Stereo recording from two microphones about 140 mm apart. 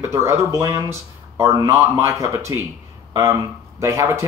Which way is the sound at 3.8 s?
20° right (ahead or behind).